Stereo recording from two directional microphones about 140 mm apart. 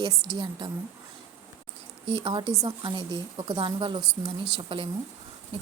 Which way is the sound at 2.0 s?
40° right (ahead or behind).